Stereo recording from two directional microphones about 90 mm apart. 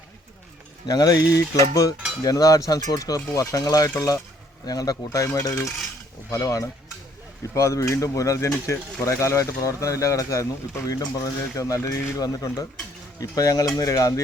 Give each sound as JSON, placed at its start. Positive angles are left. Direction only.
{"t": 0.9, "sound": "speech", "side_deg": 45}
{"t": 12.2, "sound": "speech", "side_deg": 45}